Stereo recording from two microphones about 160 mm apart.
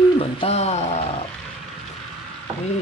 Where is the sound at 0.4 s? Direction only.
40° left (ahead or behind).